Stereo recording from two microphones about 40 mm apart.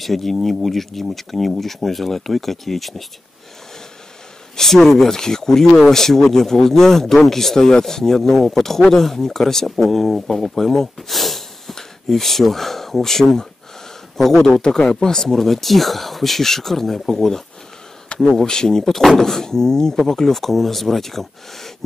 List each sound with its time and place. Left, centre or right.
0.0 s speech: centre
4.6 s speech: centre
15.2 s speech: centre